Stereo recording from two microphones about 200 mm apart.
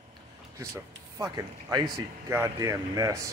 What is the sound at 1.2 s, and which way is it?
Speech, 20° right (ahead or behind).